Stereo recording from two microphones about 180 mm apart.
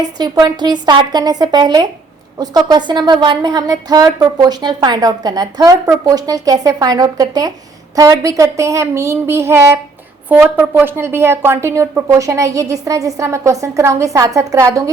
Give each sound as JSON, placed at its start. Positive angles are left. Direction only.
{"t": 0.2, "sound": "a woman's voice", "side_deg": -25}